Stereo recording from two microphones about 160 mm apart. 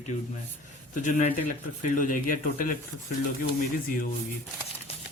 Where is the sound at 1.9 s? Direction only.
60° left (ahead or behind).